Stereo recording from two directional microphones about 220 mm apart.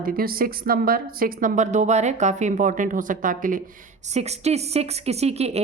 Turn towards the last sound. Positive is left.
turn(degrees=-30)  # may be behind; listen again after turning